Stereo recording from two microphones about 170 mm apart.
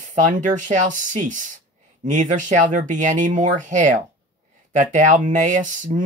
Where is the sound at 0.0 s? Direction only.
45° right (ahead or behind).